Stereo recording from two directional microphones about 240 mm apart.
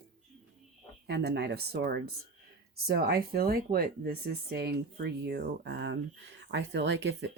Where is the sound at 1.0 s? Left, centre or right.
Right.